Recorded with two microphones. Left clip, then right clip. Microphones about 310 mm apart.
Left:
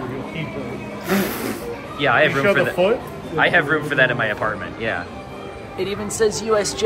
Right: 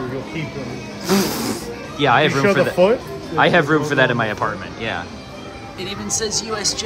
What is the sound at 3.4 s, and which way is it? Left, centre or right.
Speech, centre.